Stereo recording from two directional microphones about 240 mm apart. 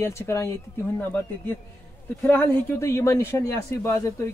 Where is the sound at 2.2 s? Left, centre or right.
Centre.